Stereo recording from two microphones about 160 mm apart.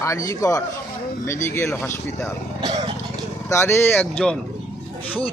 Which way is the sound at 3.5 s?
15° left (ahead or behind).